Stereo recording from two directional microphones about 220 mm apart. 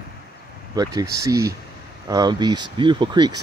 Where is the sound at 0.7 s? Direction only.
15° right (ahead or behind).